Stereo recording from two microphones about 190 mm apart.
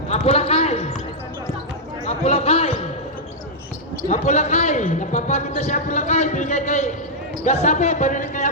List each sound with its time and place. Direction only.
0.1 s basketball bounce: 30° left (ahead or behind)
2.0 s speech: 35° left (ahead or behind)
4.1 s a man's voice: 35° left (ahead or behind)